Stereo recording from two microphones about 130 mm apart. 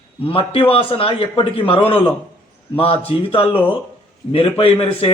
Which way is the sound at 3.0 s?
45° left (ahead or behind).